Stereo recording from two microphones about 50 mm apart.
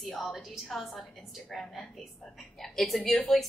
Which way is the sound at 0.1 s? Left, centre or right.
Centre.